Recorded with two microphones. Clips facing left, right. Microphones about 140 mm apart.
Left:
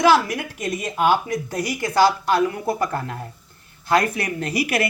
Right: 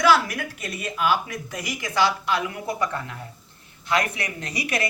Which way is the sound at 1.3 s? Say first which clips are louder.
Left 7 dB; 35° left (ahead or behind).